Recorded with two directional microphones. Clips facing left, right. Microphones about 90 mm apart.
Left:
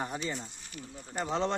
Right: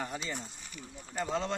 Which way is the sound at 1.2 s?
25° left (ahead or behind).